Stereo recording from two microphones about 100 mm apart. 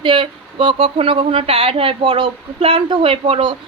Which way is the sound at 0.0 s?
55° right (ahead or behind).